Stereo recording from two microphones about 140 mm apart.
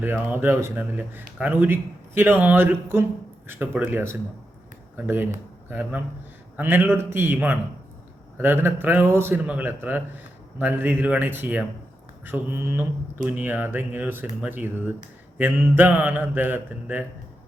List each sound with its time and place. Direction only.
0.0 s speech: 15° right (ahead or behind)